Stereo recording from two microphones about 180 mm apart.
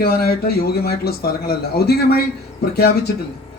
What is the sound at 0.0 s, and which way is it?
A man's voice, 55° left (ahead or behind).